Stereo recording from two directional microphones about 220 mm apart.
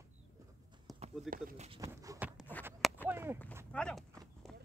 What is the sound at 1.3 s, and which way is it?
Speech, centre (ahead or behind).